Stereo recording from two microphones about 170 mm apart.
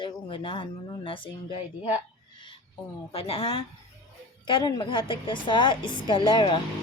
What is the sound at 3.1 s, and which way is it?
Speech, 35° left (ahead or behind).